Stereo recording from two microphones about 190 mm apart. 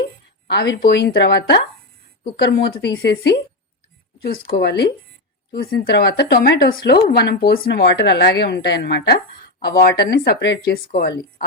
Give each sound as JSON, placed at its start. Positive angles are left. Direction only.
{"t": 0.4, "sound": "a woman's voice", "side_deg": 60}